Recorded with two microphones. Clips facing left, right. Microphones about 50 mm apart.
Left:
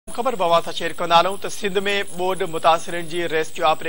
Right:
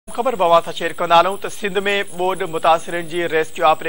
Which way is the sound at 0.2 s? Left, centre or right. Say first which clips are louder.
Right 4 dB; centre.